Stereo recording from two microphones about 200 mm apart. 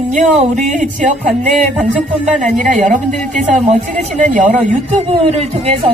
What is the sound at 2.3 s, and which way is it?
Speech, 40° right (ahead or behind).